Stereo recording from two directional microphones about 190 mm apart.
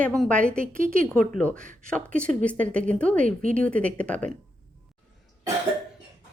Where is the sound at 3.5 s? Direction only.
5° left (ahead or behind).